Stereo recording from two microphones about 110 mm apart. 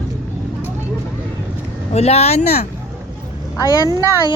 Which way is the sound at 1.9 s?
70° left (ahead or behind).